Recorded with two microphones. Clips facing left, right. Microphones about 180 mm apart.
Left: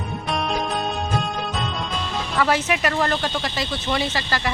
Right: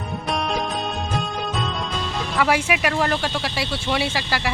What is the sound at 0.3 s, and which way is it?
Music, centre (ahead or behind).